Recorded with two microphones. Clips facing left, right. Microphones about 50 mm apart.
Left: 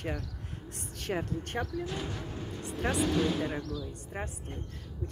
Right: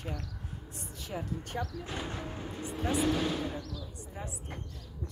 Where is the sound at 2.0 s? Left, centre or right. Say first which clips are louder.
Even; right.